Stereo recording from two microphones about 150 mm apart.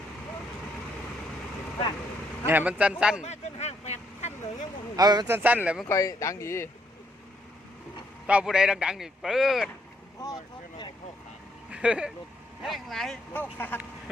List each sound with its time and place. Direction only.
2.5 s speech: 10° right (ahead or behind)
3.2 s vehicle: 50° left (ahead or behind)
4.9 s speech: 25° right (ahead or behind)
5.3 s speech: 10° right (ahead or behind)
5.9 s speech: 20° left (ahead or behind)
8.3 s a man's voice: 5° right (ahead or behind)
11.7 s a man's voice: 5° right (ahead or behind); by 13.7 s 10° left (ahead or behind)